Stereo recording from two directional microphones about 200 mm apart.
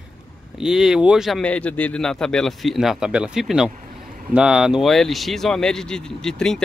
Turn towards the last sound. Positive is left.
turn(degrees=5)  # may be behind; listen again after turning